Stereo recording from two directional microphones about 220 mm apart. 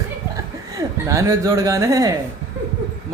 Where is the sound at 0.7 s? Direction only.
15° right (ahead or behind).